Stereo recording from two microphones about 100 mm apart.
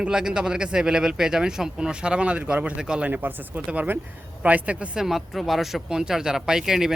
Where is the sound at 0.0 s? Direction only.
5° right (ahead or behind).